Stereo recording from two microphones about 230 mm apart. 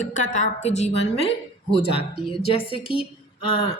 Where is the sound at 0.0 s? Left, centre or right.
Left.